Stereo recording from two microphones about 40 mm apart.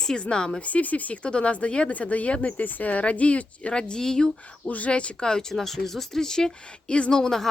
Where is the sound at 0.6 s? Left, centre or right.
Left.